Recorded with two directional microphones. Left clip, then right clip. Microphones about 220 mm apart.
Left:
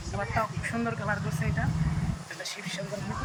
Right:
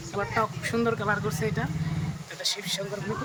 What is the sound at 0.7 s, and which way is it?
Speech, 10° right (ahead or behind).